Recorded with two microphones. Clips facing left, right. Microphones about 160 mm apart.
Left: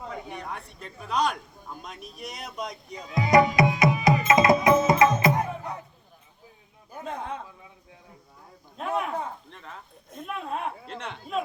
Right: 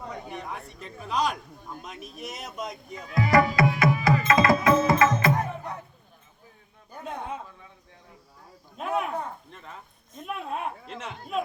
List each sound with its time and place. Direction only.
0.1 s speech: centre (ahead or behind)
2.9 s music: 20° left (ahead or behind)
6.9 s a sound: centre (ahead or behind)
8.8 s speech: centre (ahead or behind)